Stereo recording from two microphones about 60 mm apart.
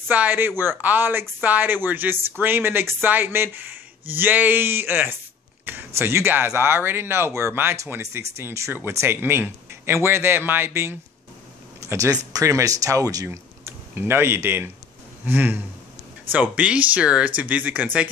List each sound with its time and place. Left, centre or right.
0.1 s speech: right
9.0 s speech: right
11.8 s speech: right
13.7 s speech: right